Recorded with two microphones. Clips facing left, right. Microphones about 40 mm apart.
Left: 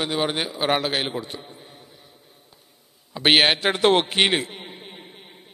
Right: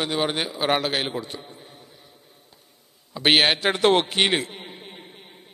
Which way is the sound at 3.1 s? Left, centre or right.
Centre.